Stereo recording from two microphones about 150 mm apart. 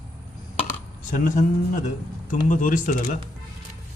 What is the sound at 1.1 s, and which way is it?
Speech, 60° left (ahead or behind).